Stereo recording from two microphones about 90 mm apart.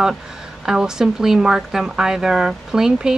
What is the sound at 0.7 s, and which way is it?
Speech, 5° right (ahead or behind).